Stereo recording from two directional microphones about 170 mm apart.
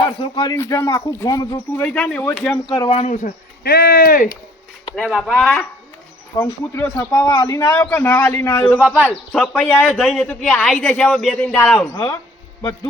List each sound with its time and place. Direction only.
0.2 s speech: 25° left (ahead or behind)
1.8 s speech: 5° left (ahead or behind)
2.6 s speech: 30° left (ahead or behind)
3.6 s speech: 65° left (ahead or behind)
5.1 s speech: 5° left (ahead or behind)
6.3 s speech: 20° left (ahead or behind); by 11.9 s centre (ahead or behind)